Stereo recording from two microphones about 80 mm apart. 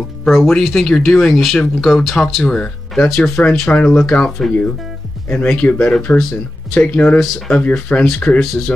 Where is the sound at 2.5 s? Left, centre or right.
Centre.